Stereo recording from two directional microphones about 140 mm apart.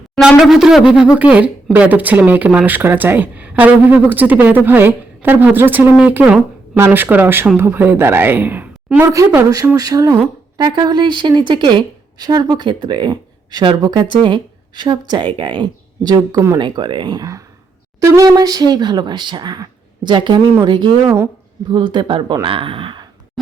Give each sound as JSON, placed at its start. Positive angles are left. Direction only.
{"t": 0.2, "sound": "speech", "side_deg": -5}
{"t": 21.9, "sound": "speech", "side_deg": -35}